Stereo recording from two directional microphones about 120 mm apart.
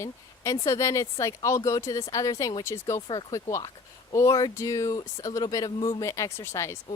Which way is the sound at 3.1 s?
40° left (ahead or behind).